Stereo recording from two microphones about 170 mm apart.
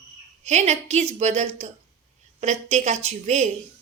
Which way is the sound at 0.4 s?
40° right (ahead or behind).